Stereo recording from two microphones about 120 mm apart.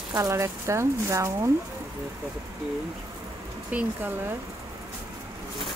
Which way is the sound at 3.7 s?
10° right (ahead or behind).